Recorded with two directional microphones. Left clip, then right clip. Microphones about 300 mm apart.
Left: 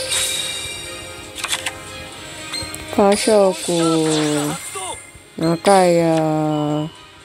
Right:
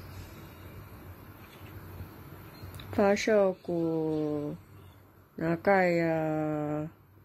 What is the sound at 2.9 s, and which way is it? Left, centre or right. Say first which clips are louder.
Speech: left 11 dB; centre.